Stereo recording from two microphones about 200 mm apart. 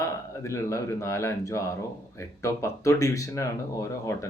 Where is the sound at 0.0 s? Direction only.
15° left (ahead or behind).